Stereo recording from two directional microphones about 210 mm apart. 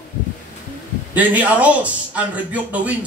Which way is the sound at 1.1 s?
10° right (ahead or behind).